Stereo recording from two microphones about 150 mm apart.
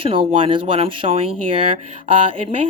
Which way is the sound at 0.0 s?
35° right (ahead or behind).